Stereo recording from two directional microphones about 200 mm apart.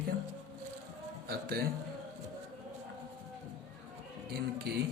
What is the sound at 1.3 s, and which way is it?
Speech, 50° right (ahead or behind).